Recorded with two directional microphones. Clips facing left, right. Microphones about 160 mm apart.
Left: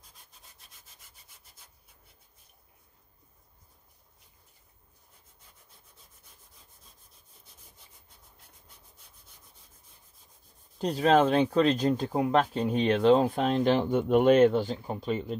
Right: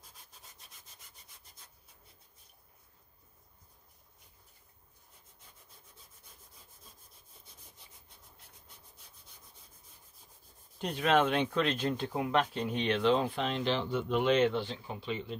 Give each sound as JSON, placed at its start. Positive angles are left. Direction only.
{"t": 10.8, "sound": "speech", "side_deg": 35}